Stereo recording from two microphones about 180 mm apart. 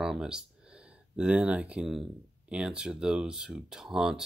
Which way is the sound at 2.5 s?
5° right (ahead or behind).